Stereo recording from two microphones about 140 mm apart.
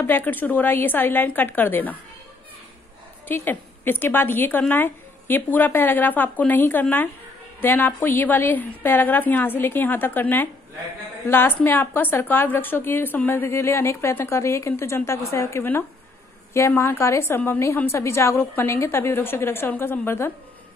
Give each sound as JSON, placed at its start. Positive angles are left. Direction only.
{"t": 0.0, "sound": "a woman's voice", "side_deg": 15}
{"t": 3.3, "sound": "a woman's voice", "side_deg": 15}